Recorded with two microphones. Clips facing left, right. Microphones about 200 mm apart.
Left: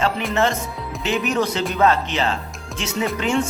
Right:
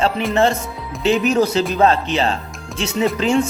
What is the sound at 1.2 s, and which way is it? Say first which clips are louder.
Speech: right 5 dB; 25° right (ahead or behind).